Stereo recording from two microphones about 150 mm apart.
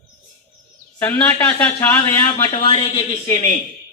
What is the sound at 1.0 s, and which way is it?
A man's voice, 10° left (ahead or behind).